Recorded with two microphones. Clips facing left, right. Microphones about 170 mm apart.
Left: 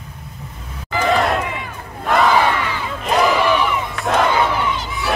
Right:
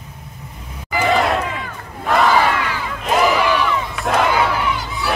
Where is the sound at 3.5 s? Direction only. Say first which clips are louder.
Left 1 dB; 15° left (ahead or behind).